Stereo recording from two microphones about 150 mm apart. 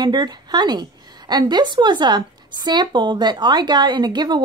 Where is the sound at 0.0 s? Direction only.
30° right (ahead or behind).